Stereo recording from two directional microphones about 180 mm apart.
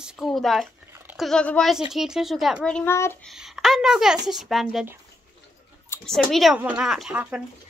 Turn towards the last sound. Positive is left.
turn(degrees=-5)  # may be behind; listen again after turning